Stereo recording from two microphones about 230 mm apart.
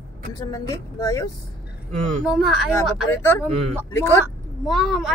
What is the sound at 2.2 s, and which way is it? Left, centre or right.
Speech, centre.